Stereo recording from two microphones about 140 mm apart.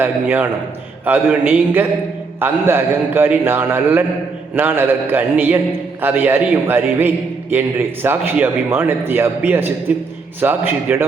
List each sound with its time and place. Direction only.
0.0 s a man's voice: 15° right (ahead or behind)